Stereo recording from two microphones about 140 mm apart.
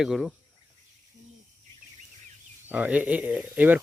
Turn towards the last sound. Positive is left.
turn(degrees=-10)  # may be behind; listen again after turning